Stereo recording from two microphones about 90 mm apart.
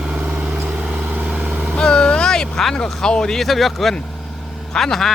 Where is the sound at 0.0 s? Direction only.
10° right (ahead or behind).